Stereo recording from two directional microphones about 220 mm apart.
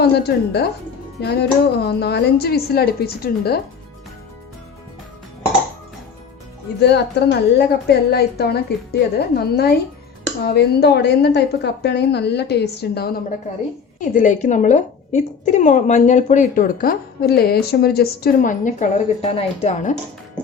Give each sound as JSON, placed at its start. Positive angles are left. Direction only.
{"t": 0.0, "sound": "a woman's voice", "side_deg": 45}
{"t": 6.7, "sound": "a woman's voice", "side_deg": 50}
{"t": 14.0, "sound": "a woman's voice", "side_deg": 35}